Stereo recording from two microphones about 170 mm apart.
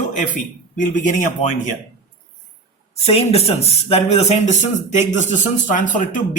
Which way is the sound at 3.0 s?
35° left (ahead or behind).